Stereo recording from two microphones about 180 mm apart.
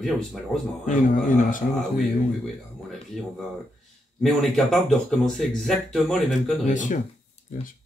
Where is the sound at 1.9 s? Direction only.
Centre (ahead or behind).